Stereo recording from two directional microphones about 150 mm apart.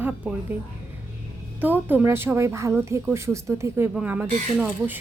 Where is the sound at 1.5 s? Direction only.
10° right (ahead or behind).